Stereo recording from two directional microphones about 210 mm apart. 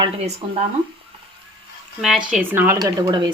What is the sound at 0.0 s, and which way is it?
Speech, 25° right (ahead or behind).